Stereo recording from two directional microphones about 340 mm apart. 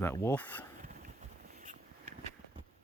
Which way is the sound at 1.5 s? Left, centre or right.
Right.